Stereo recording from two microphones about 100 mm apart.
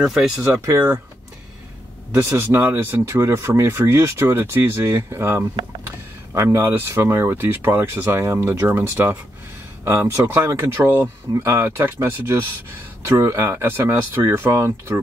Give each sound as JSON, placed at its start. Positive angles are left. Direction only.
{"t": 0.0, "sound": "speech", "side_deg": -5}
{"t": 2.2, "sound": "speech", "side_deg": -20}